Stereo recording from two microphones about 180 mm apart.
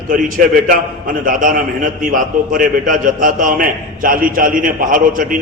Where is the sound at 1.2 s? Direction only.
50° right (ahead or behind).